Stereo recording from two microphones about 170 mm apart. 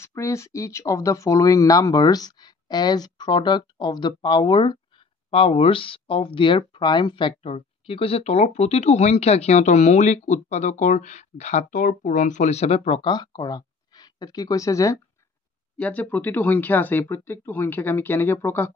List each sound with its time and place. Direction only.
0.0 s speech: 15° left (ahead or behind)